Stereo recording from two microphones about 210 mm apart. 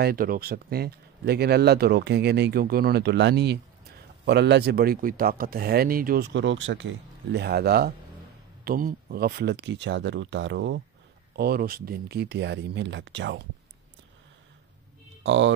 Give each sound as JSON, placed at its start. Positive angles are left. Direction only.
{"t": 0.0, "sound": "speech", "side_deg": -45}
{"t": 7.3, "sound": "speech", "side_deg": -50}
{"t": 11.3, "sound": "speech", "side_deg": -50}
{"t": 15.2, "sound": "speech", "side_deg": -60}